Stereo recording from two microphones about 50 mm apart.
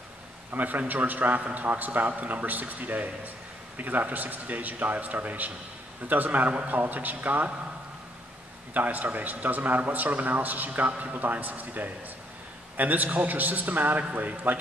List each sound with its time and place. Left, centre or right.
0.5 s a man's voice: right
8.7 s a man's voice: right